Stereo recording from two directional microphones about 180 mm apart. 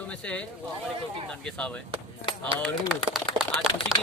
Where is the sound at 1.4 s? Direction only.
5° left (ahead or behind).